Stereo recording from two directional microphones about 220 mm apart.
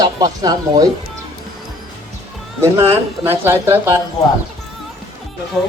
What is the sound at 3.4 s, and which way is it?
Speech, 10° right (ahead or behind).